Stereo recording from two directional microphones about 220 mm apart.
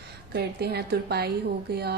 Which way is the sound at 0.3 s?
45° right (ahead or behind).